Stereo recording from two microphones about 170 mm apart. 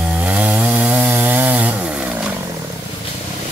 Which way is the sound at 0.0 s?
5° right (ahead or behind).